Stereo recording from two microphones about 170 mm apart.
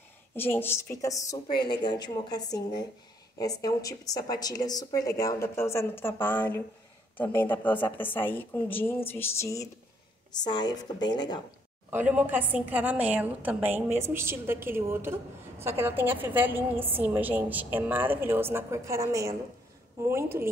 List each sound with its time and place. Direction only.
0.4 s a woman's voice: 15° left (ahead or behind)
11.9 s a woman's voice: 10° right (ahead or behind)